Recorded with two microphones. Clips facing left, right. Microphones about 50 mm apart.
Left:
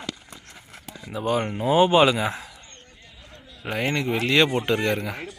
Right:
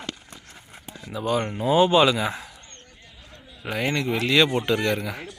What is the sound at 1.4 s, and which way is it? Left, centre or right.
Speech, centre.